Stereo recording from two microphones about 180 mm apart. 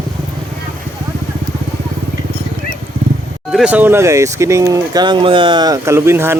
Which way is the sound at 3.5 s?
5° right (ahead or behind).